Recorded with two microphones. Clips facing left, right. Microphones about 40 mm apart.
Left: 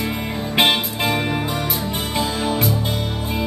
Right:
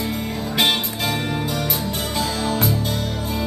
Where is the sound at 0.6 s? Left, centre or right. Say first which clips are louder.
Left 3 dB; left.